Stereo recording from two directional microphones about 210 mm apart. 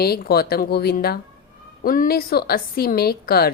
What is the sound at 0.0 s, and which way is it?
A woman's voice, 45° left (ahead or behind).